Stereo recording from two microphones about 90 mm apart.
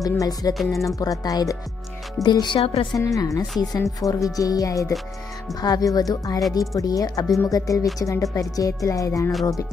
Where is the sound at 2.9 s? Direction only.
40° left (ahead or behind).